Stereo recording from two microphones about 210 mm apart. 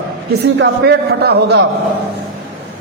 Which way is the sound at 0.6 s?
50° right (ahead or behind).